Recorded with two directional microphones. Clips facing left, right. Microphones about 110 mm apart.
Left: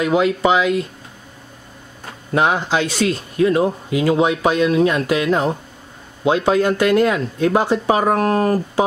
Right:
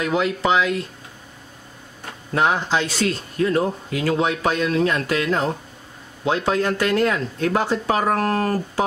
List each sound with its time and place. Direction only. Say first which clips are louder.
0.0 s speech: left 5 dB; 10° left (ahead or behind)
2.3 s speech: left 3 dB; 10° left (ahead or behind)